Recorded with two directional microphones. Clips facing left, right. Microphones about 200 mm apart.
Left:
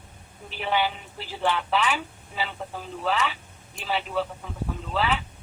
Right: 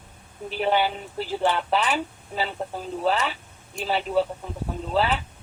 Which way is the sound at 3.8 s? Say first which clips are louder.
Right 5 dB; 40° right (ahead or behind).